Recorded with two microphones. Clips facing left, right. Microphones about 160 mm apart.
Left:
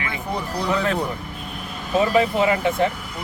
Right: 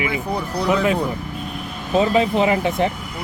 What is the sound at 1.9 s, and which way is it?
Speech, 20° right (ahead or behind).